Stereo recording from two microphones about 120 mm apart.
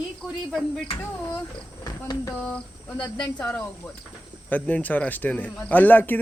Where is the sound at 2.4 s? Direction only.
10° left (ahead or behind).